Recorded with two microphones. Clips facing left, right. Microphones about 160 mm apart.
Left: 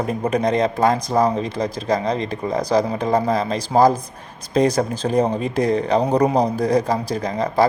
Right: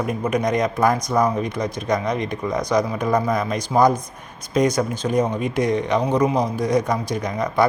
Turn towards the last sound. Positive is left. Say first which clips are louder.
# left 2 dB
turn(degrees=30)  # may be behind; listen again after turning